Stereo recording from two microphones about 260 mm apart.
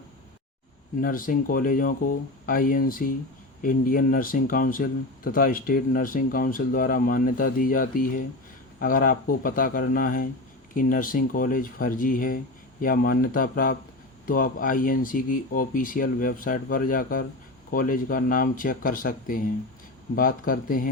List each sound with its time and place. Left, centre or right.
1.0 s speech: left